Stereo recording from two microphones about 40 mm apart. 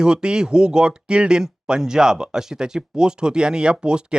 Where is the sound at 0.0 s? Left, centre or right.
Right.